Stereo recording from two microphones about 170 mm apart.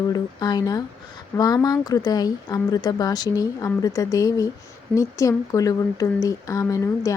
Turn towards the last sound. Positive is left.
turn(degrees=20)  # may be behind; listen again after turning